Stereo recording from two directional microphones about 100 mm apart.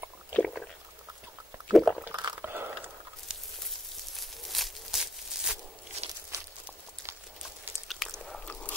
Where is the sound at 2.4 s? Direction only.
20° right (ahead or behind).